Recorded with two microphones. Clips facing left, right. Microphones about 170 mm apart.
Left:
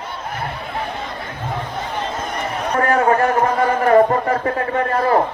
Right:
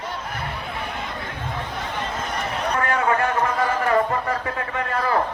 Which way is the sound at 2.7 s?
40° left (ahead or behind).